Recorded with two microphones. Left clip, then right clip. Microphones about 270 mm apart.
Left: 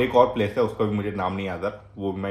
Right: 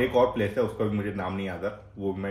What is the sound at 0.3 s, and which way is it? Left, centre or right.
Speech, centre.